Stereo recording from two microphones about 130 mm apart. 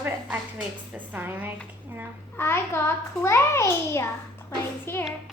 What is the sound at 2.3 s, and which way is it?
A child's voice, 20° left (ahead or behind).